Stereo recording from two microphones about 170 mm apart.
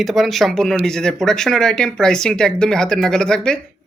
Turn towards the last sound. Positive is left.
turn(degrees=5)  # may be behind; listen again after turning